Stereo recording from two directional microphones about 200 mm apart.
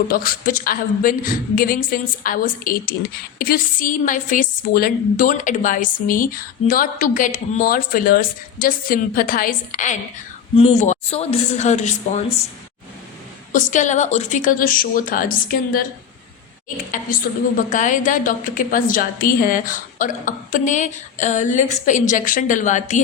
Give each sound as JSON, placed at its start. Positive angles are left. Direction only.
{"t": 0.1, "sound": "a woman's voice", "side_deg": 45}
{"t": 13.5, "sound": "a woman's voice", "side_deg": 40}